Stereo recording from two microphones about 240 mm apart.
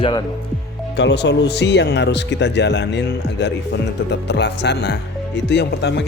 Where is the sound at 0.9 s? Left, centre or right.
Left.